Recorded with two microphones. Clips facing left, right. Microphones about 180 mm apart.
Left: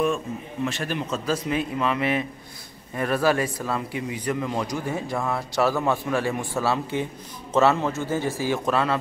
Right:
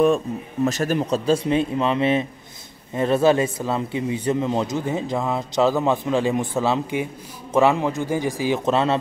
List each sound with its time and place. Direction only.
0.7 s a man's voice: 40° right (ahead or behind); by 8.9 s 25° right (ahead or behind)